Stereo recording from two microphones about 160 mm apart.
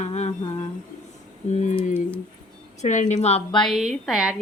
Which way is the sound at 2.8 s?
50° left (ahead or behind).